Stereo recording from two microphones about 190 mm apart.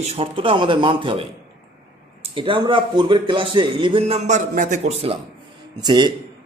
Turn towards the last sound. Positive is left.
turn(degrees=-20)  # may be behind; listen again after turning